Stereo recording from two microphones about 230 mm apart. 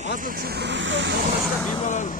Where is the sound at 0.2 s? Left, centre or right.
Right.